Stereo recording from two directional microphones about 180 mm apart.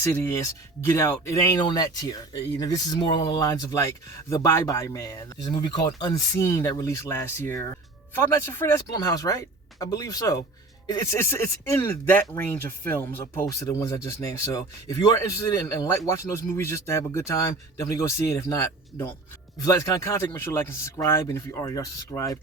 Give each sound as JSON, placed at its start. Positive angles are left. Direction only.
{"t": 0.0, "sound": "speech", "side_deg": 15}